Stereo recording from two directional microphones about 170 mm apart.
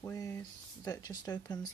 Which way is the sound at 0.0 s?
20° left (ahead or behind).